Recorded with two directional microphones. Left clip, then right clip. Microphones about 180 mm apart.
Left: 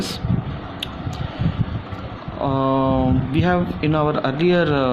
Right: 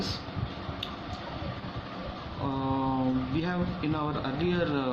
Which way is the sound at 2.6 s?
55° left (ahead or behind).